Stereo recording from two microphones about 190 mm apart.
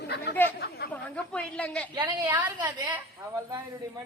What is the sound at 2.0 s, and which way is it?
Speech, 20° right (ahead or behind).